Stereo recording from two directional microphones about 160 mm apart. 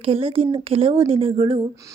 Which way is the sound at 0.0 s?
35° right (ahead or behind).